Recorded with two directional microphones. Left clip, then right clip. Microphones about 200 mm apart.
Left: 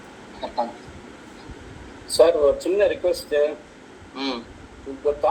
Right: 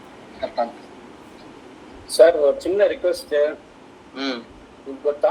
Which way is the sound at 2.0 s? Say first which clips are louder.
Right 2 dB; 15° right (ahead or behind).